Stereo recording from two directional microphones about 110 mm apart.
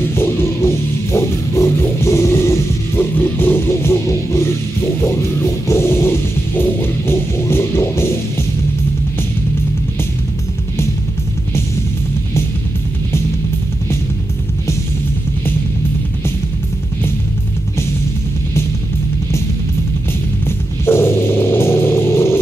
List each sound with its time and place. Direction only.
0.1 s music: 20° left (ahead or behind)
5.7 s music: 25° left (ahead or behind)
20.8 s music: 20° left (ahead or behind)